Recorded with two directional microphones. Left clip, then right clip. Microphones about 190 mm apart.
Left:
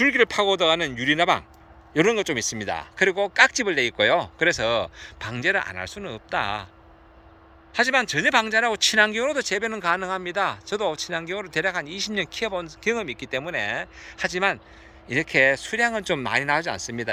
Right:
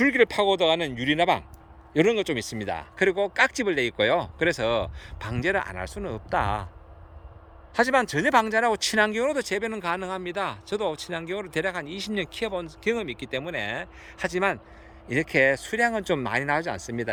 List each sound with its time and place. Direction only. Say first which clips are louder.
0.0 s speech: left 1 dB; 15° right (ahead or behind)
7.7 s speech: left 1 dB; 25° right (ahead or behind)